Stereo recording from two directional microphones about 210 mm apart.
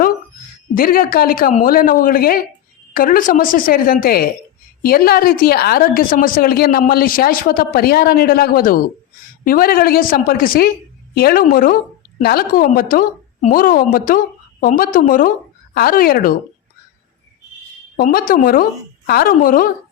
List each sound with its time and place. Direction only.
0.7 s a woman's voice: 45° left (ahead or behind)
17.9 s a woman's voice: 45° left (ahead or behind)